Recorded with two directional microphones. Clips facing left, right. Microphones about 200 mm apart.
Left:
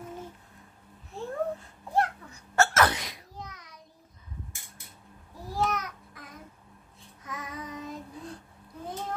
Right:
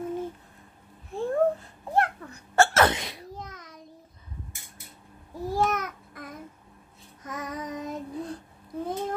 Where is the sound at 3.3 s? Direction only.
50° right (ahead or behind).